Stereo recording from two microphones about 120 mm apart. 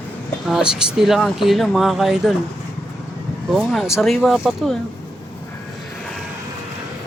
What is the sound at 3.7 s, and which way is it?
Speech, centre (ahead or behind).